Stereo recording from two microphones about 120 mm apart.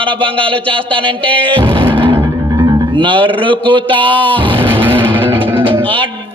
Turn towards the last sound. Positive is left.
turn(degrees=-45)  # may be behind; listen again after turning